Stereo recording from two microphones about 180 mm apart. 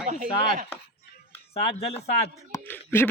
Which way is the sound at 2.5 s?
10° left (ahead or behind).